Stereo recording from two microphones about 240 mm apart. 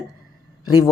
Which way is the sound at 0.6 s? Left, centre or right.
Left.